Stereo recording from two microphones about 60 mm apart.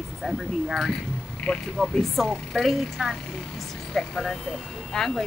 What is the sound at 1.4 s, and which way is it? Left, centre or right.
Speech, centre.